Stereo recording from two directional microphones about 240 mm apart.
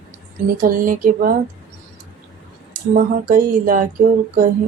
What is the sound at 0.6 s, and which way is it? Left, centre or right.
Speech, right.